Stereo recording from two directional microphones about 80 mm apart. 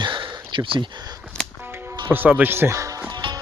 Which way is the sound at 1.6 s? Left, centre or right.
Right.